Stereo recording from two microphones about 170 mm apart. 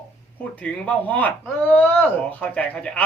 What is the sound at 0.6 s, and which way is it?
A child's voice, 10° left (ahead or behind).